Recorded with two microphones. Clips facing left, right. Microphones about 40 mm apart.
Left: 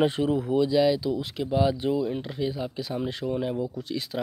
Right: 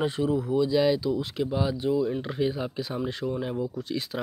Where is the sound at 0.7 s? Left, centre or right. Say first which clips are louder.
Left 1 dB; centre.